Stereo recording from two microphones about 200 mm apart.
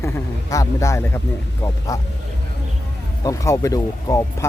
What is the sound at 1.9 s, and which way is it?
Speech, 15° left (ahead or behind).